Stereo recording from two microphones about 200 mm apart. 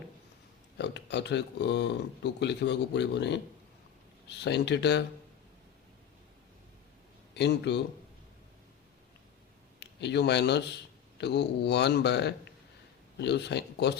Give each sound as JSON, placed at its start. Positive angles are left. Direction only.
{"t": 0.8, "sound": "speech", "side_deg": 60}
{"t": 7.3, "sound": "speech", "side_deg": 60}
{"t": 9.8, "sound": "speech", "side_deg": 60}